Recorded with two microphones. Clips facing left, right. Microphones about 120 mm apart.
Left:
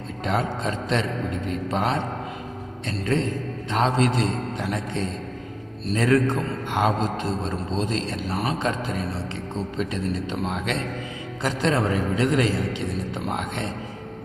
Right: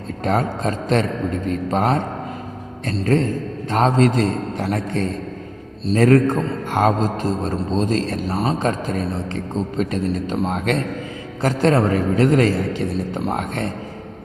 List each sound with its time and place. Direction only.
0.3 s speech: 45° right (ahead or behind)
3.0 s speech: 45° right (ahead or behind)
8.3 s speech: 25° right (ahead or behind)
8.5 s speech: 45° right (ahead or behind)